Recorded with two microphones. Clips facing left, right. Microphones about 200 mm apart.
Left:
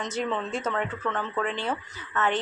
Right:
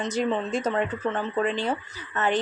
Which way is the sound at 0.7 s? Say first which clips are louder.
Right 3 dB; 30° right (ahead or behind).